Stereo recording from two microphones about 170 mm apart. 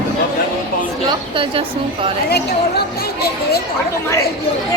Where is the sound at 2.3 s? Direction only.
70° left (ahead or behind).